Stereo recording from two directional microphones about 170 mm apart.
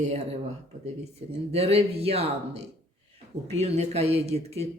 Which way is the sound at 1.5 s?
35° right (ahead or behind).